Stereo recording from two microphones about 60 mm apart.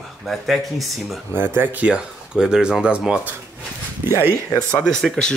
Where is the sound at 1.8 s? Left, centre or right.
Centre.